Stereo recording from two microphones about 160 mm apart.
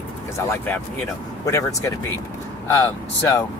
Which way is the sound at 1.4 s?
20° left (ahead or behind).